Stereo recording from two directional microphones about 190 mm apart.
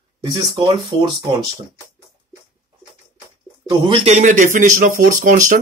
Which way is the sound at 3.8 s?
30° right (ahead or behind).